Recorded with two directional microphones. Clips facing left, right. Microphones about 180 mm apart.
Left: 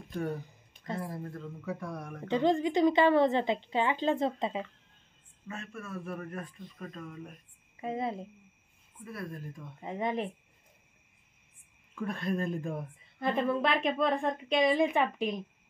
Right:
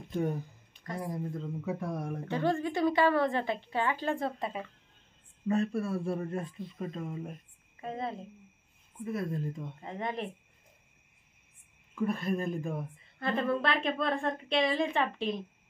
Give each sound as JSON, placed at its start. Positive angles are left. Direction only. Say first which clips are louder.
{"t": 0.1, "sound": "speech", "louder": "right 3 dB", "side_deg": -20}
{"t": 2.2, "sound": "a woman's voice", "louder": "left 4 dB", "side_deg": 20}
{"t": 5.5, "sound": "speech", "louder": "right 11 dB", "side_deg": -35}
{"t": 7.8, "sound": "a woman's voice", "louder": "left 3 dB", "side_deg": 20}
{"t": 9.0, "sound": "speech", "louder": "right 7 dB", "side_deg": -25}
{"t": 9.8, "sound": "a woman's voice", "louder": "left 6 dB", "side_deg": 15}
{"t": 11.9, "sound": "speech", "louder": "right 2 dB", "side_deg": -5}
{"t": 13.6, "sound": "a woman's voice", "louder": "left 2 dB", "side_deg": 20}